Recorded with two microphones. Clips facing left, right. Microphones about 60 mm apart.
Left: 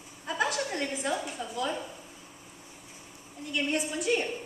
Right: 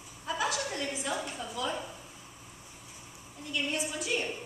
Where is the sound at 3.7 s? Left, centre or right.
Left.